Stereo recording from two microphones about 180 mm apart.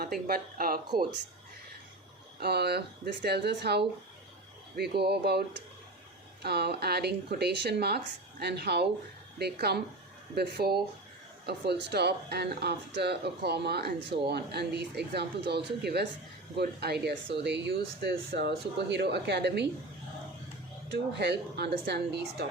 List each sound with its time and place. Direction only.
0.0 s speech: 55° right (ahead or behind)
2.4 s speech: 65° right (ahead or behind)
20.9 s speech: 70° right (ahead or behind)